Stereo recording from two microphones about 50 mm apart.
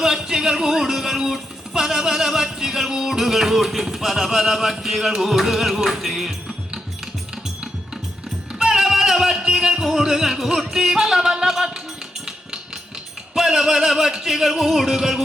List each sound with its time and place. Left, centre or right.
0.0 s speech: centre
8.5 s music: centre
11.2 s speech: centre
13.3 s speech: centre
14.3 s music: centre